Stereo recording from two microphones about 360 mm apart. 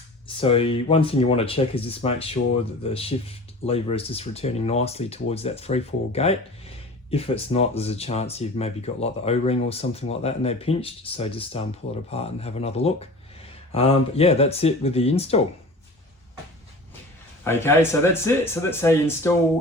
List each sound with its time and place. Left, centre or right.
0.3 s speech: centre
17.4 s speech: centre